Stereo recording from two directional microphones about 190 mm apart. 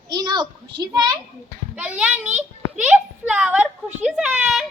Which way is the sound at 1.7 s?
5° right (ahead or behind).